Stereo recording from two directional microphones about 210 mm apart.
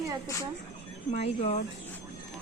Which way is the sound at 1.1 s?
30° left (ahead or behind).